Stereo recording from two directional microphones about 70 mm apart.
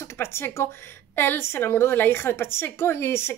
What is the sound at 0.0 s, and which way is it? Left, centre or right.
Speech, left.